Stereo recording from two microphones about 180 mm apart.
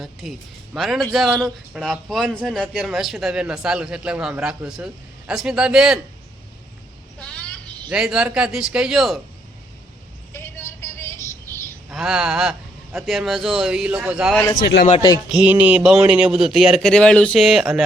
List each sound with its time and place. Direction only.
0.0 s a man's voice: centre (ahead or behind)
7.2 s vehicle: 5° left (ahead or behind)
7.9 s a man's voice: 5° right (ahead or behind)
10.3 s vehicle: 15° left (ahead or behind)
11.9 s a man's voice: 5° right (ahead or behind)
14.3 s a man's voice: 20° left (ahead or behind)
14.6 s speech: 70° left (ahead or behind)
15.3 s a man's voice: 5° right (ahead or behind)